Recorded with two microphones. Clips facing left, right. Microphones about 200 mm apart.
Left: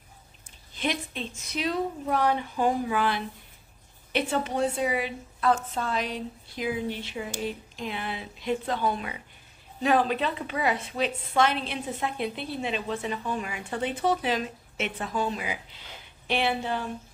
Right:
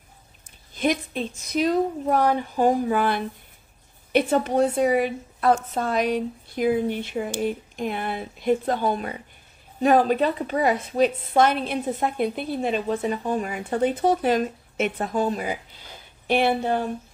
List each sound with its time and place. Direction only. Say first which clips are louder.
0.7 s a woman's voice: right 7 dB; 45° right (ahead or behind)